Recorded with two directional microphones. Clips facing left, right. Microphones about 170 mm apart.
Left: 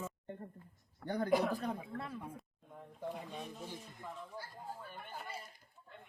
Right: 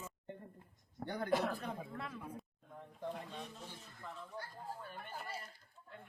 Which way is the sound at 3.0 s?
10° left (ahead or behind).